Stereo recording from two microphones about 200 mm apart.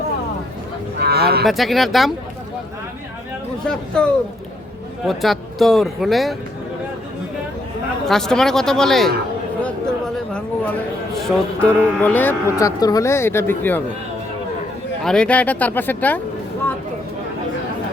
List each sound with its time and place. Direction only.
0.9 s a sound: 55° right (ahead or behind)
1.5 s speech: centre (ahead or behind)
3.6 s speech: 5° left (ahead or behind)
8.0 s speech: centre (ahead or behind)
10.3 s a man's voice: 5° left (ahead or behind)
15.0 s a man's voice: 5° left (ahead or behind)